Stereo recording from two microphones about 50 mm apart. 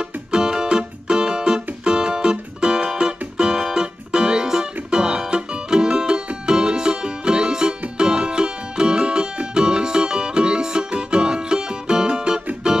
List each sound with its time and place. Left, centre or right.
0.0 s music: centre